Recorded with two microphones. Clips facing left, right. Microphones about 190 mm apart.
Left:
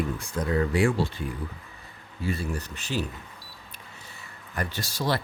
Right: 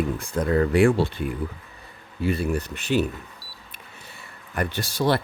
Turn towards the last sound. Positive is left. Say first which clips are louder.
# right 5 dB
turn(degrees=-60)  # may be behind; listen again after turning